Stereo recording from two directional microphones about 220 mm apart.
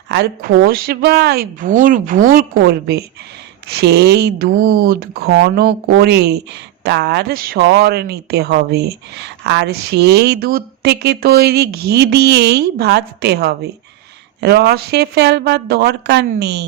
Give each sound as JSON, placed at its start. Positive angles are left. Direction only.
{"t": 0.1, "sound": "speech", "side_deg": -45}